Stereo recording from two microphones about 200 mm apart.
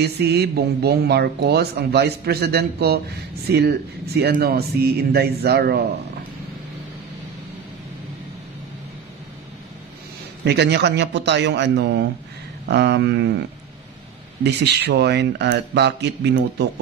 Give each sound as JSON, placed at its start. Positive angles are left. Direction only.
{"t": 0.0, "sound": "speech", "side_deg": -55}
{"t": 10.4, "sound": "speech", "side_deg": -60}
{"t": 14.4, "sound": "speech", "side_deg": -55}